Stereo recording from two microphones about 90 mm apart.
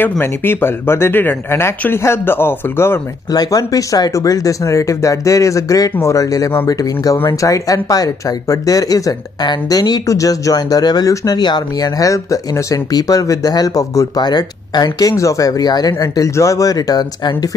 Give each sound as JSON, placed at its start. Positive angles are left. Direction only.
{"t": 0.2, "sound": "speech", "side_deg": 25}
{"t": 3.3, "sound": "speech", "side_deg": 45}